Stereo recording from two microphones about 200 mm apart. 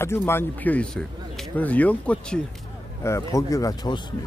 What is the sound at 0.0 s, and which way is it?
Speech, 10° left (ahead or behind).